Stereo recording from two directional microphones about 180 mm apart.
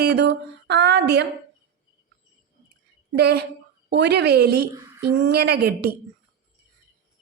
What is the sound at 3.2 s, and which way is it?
A woman's voice, 65° right (ahead or behind).